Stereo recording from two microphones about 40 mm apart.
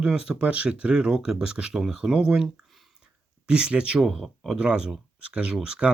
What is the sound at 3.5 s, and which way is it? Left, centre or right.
Speech, right.